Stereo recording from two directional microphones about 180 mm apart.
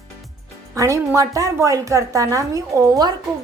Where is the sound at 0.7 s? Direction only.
15° right (ahead or behind).